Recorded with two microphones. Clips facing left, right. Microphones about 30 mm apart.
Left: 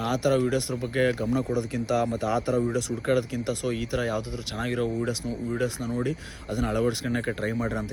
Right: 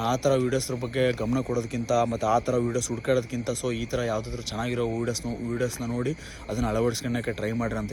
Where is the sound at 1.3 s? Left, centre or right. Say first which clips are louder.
Even; left.